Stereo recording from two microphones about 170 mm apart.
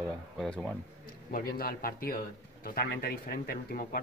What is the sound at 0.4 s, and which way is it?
Speech, centre (ahead or behind).